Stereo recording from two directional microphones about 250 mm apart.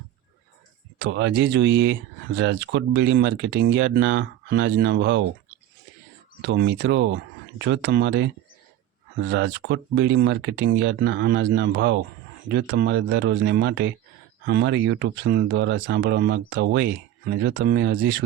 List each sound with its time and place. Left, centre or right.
0.9 s speech: right
6.4 s speech: right